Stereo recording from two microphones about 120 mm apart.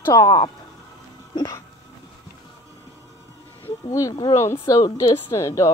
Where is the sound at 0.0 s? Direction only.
30° left (ahead or behind).